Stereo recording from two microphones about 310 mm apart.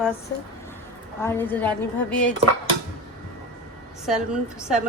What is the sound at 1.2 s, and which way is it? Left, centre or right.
A woman's voice, centre.